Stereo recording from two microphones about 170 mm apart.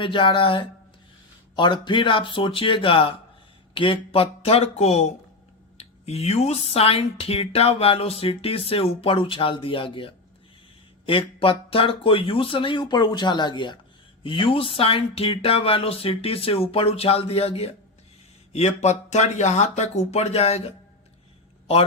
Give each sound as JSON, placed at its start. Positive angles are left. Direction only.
{"t": 0.0, "sound": "speech", "side_deg": 30}